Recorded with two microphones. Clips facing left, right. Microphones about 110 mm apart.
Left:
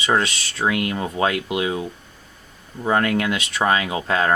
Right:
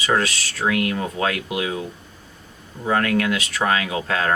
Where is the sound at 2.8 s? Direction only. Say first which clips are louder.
Even; 25° left (ahead or behind).